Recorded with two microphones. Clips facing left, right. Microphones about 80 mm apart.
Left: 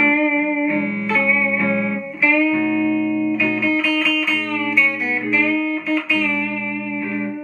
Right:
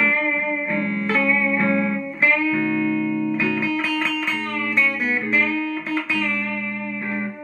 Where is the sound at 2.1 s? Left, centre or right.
Right.